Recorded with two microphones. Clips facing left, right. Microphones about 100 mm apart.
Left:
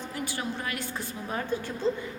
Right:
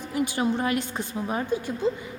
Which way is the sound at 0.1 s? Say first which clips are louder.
Right 11 dB; 20° right (ahead or behind).